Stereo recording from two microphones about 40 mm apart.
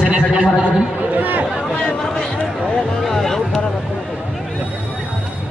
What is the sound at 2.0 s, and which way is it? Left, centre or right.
Chatter, centre.